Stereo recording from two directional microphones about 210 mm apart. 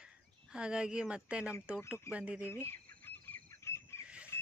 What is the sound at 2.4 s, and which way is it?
Bird, 10° left (ahead or behind).